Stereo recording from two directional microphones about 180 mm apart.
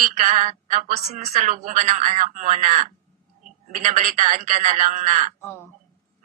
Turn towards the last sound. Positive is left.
turn(degrees=15)  # may be behind; listen again after turning